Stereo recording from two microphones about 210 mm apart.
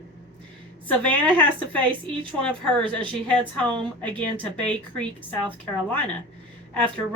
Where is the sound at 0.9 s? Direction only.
5° left (ahead or behind).